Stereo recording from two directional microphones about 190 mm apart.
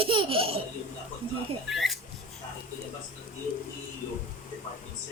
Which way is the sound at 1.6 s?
Centre (ahead or behind).